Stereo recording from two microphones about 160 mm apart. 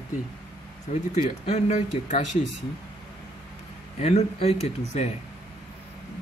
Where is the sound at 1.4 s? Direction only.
40° left (ahead or behind).